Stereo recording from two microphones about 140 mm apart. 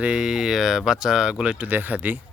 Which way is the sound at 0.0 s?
5° right (ahead or behind).